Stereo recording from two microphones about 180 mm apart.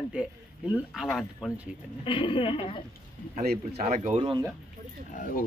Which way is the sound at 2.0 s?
30° left (ahead or behind).